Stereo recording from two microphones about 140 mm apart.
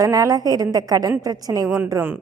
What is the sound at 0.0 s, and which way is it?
A woman's voice, 25° right (ahead or behind).